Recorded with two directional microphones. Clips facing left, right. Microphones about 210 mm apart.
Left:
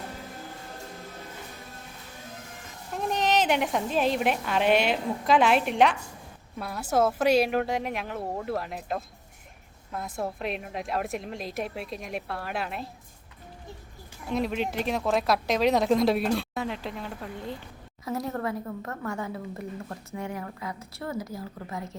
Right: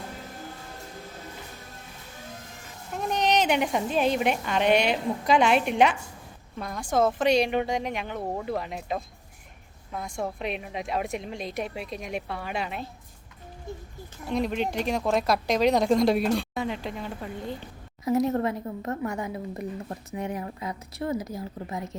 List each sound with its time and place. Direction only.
2.9 s a woman's voice: centre (ahead or behind)
14.3 s a woman's voice: centre (ahead or behind)
18.0 s speech: 20° right (ahead or behind)